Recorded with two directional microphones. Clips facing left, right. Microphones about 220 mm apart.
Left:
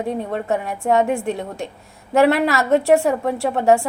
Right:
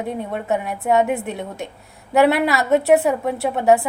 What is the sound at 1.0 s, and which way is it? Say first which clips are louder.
A woman's voice: left 1 dB; 20° right (ahead or behind).